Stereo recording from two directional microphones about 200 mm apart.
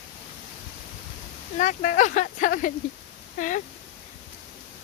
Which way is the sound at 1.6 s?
40° left (ahead or behind).